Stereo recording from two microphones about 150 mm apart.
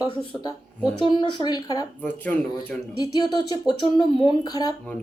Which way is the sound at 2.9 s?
30° left (ahead or behind).